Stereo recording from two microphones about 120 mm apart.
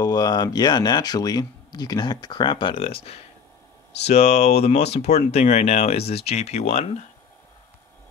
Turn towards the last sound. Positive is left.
turn(degrees=60)  # may be behind; listen again after turning